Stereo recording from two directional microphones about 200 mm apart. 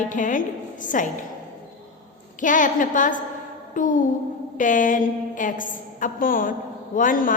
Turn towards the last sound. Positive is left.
turn(degrees=45)  # may be behind; listen again after turning